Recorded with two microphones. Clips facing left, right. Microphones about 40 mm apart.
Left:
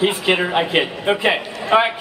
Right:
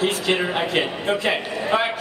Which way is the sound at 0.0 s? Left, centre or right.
Left.